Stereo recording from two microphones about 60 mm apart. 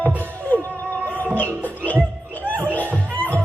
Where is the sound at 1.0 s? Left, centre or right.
Left.